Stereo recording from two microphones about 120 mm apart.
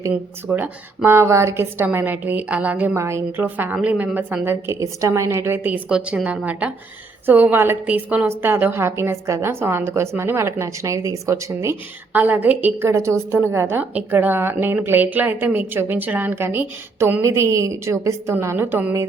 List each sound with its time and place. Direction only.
0.1 s a woman's voice: 15° right (ahead or behind)
12.1 s a woman's voice: 15° right (ahead or behind)